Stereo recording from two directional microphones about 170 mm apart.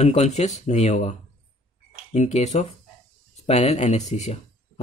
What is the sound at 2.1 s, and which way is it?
Speech, 40° left (ahead or behind).